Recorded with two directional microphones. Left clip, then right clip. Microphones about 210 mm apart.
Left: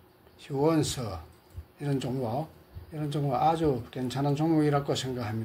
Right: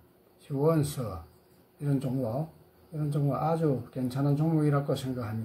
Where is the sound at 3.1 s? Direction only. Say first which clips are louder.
Left 4 dB; 25° left (ahead or behind).